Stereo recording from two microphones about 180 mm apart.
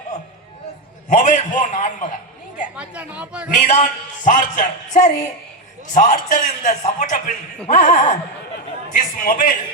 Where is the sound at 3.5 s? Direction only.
45° left (ahead or behind).